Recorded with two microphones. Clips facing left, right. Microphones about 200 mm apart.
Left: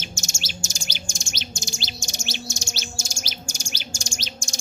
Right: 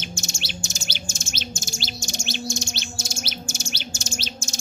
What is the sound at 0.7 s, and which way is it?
Bird, 15° left (ahead or behind).